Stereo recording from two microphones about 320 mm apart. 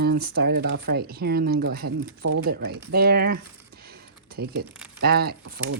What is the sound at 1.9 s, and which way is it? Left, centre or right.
Speech, right.